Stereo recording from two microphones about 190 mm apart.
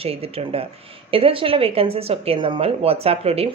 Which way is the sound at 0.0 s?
30° right (ahead or behind).